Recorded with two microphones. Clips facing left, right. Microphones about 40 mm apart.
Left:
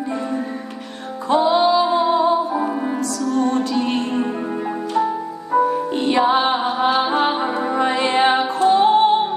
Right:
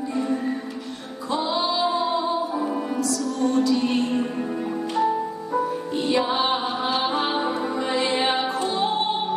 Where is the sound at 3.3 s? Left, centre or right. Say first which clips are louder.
Left 2 dB; left.